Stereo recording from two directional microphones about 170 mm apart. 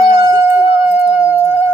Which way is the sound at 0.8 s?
40° left (ahead or behind).